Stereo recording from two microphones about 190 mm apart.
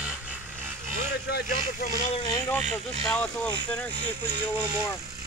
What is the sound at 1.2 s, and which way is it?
Vehicle, 55° left (ahead or behind).